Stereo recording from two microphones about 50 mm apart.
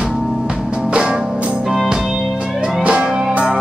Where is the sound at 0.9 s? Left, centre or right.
Centre.